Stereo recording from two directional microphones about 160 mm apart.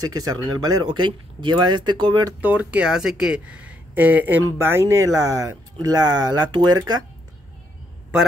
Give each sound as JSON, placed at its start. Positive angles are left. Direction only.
{"t": 0.1, "sound": "speech", "side_deg": -25}
{"t": 2.4, "sound": "speech", "side_deg": -10}